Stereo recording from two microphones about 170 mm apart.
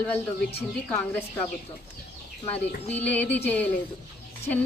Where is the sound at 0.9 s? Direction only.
10° left (ahead or behind).